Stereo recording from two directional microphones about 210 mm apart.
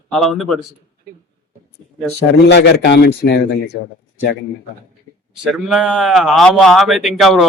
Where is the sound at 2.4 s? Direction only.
55° left (ahead or behind).